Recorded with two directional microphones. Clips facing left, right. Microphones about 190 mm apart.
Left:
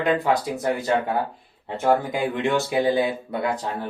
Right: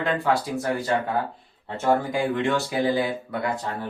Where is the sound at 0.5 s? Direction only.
20° left (ahead or behind).